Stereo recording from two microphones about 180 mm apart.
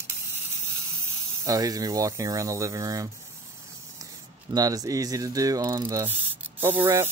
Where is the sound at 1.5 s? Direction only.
20° right (ahead or behind).